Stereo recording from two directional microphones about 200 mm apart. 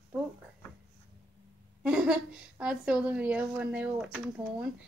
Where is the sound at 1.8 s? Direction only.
5° right (ahead or behind).